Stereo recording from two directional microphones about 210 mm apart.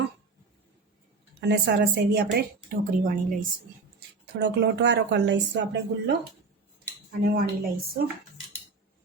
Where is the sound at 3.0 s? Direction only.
40° right (ahead or behind).